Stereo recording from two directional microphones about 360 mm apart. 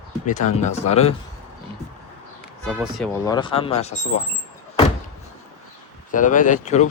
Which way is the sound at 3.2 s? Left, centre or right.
Centre.